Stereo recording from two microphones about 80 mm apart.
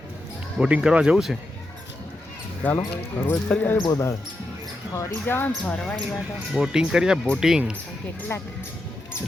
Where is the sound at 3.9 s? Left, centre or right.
Left.